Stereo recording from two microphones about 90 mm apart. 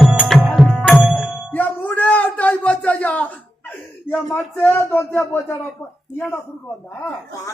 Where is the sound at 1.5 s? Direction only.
20° left (ahead or behind).